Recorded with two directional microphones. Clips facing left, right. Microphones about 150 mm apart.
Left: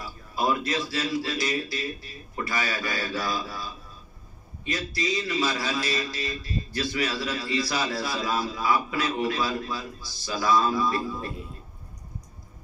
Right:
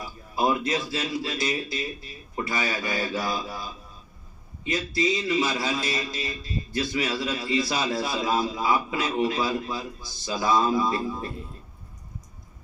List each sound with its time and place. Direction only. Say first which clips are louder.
0.4 s a man's voice: right 2 dB; 20° right (ahead or behind)